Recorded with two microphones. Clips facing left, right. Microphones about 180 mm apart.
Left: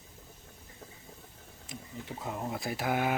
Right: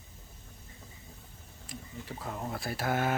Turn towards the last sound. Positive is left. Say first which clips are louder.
# even
turn(degrees=15)  # may be behind; listen again after turning